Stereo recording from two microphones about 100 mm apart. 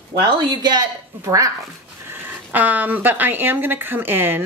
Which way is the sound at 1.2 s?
35° right (ahead or behind).